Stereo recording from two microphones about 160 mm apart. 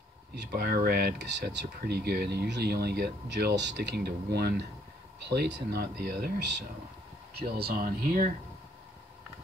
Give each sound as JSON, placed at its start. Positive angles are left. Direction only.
{"t": 0.4, "sound": "speech", "side_deg": -80}